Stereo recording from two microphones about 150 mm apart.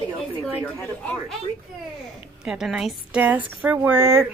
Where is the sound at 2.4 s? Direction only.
5° right (ahead or behind).